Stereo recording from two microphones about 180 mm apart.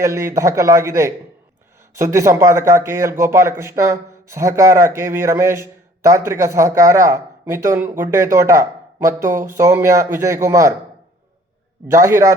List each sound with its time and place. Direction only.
0.0 s speech: 15° right (ahead or behind)
11.9 s speech: 15° right (ahead or behind)